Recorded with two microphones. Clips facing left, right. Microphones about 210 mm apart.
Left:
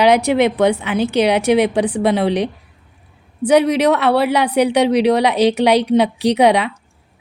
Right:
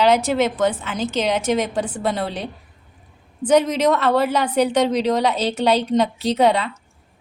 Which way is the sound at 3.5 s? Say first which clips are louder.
Left 3 dB; 10° left (ahead or behind).